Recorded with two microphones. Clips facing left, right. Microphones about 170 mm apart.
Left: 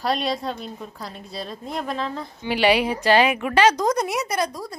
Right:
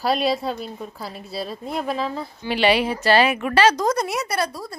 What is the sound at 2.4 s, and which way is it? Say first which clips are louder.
A woman's voice: even; 10° left (ahead or behind).